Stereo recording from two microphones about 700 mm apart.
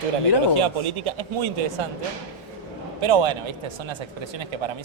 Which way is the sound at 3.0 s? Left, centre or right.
Right.